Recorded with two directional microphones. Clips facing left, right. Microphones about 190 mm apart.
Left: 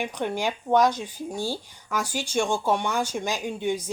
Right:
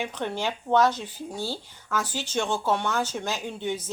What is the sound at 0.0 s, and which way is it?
Speech, 10° left (ahead or behind).